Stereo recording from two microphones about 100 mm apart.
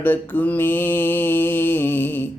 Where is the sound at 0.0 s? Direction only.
20° left (ahead or behind).